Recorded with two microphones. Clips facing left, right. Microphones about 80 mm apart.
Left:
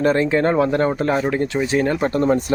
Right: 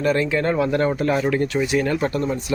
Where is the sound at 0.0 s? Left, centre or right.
Left.